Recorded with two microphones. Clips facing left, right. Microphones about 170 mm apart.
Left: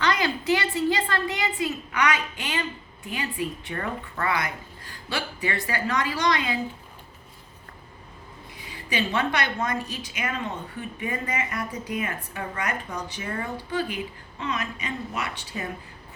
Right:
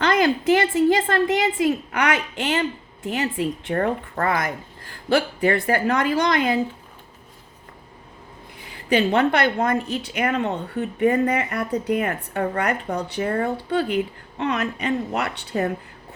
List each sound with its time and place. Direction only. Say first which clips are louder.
0.0 s a woman's voice: right 6 dB; 50° right (ahead or behind)
8.9 s speech: right 8 dB; 55° right (ahead or behind)